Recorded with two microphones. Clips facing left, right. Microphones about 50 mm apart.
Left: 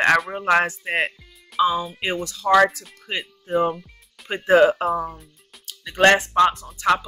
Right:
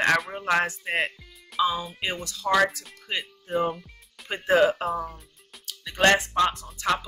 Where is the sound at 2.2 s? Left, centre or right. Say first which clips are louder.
Left 7 dB; left.